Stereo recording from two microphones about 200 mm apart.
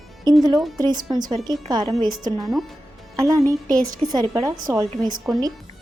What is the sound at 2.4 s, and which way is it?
Speech, centre (ahead or behind).